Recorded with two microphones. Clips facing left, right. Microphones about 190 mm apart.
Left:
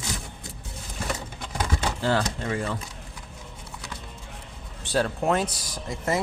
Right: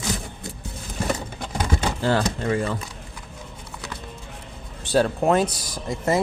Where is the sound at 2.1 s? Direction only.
45° right (ahead or behind).